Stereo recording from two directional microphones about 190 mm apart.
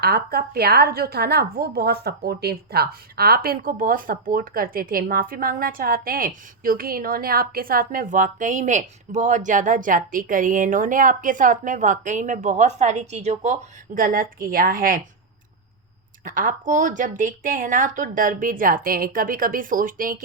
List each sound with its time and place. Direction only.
0.0 s a woman's voice: 55° right (ahead or behind)
16.2 s a woman's voice: 45° right (ahead or behind)